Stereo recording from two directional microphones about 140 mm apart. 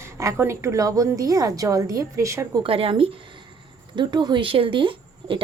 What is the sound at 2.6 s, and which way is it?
A woman's voice, 40° right (ahead or behind).